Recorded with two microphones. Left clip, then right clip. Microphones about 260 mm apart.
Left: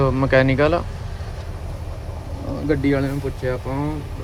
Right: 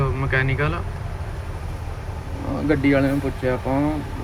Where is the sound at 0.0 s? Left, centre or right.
Centre.